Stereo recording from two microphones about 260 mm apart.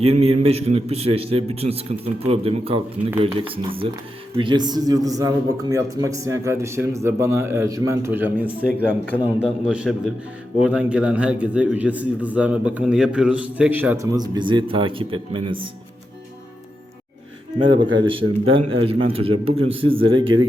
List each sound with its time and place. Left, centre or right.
0.0 s a man's voice: right
17.6 s a man's voice: centre
19.3 s a man's voice: right
19.6 s a man's voice: right